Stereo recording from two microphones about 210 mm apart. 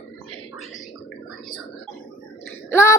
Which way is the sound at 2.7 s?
15° left (ahead or behind).